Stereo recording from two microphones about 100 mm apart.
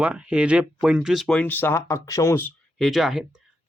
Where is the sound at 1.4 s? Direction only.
20° left (ahead or behind).